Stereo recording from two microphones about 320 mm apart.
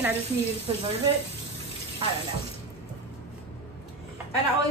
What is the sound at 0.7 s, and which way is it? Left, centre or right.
Speech, centre.